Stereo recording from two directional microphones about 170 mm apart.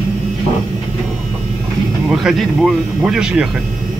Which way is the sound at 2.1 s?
Centre (ahead or behind).